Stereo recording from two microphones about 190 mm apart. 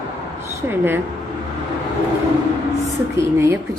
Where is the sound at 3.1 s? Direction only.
15° right (ahead or behind).